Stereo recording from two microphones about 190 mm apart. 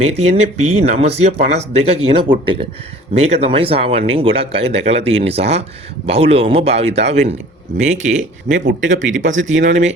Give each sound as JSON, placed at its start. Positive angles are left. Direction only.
{"t": 0.0, "sound": "speech", "side_deg": -35}